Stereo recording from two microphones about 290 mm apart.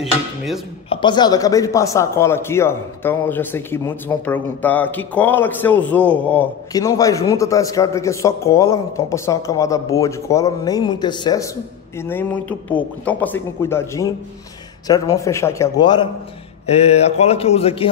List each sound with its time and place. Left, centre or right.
0.8 s speech: centre